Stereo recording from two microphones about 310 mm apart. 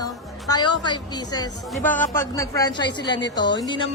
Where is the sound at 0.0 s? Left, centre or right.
Centre.